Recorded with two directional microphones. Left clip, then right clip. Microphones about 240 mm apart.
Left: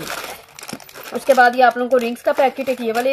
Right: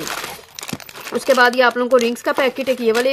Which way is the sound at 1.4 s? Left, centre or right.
Right.